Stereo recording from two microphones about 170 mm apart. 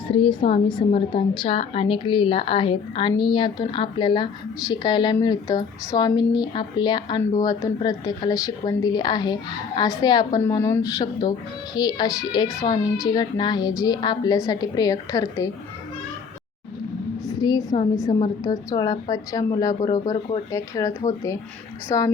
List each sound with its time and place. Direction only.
0.1 s a woman's voice: 30° left (ahead or behind)
17.2 s a woman's voice: 25° left (ahead or behind)